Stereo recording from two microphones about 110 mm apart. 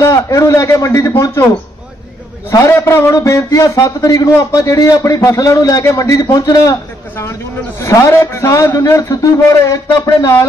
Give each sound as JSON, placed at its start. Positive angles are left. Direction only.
{"t": 0.0, "sound": "speech", "side_deg": 30}
{"t": 2.5, "sound": "a man's voice", "side_deg": 25}